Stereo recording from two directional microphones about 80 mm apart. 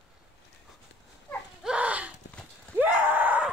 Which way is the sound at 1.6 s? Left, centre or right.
Centre.